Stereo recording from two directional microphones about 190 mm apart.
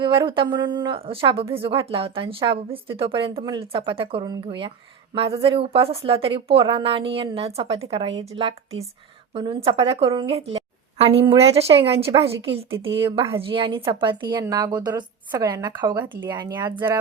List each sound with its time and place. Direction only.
0.0 s a woman's voice: 25° right (ahead or behind)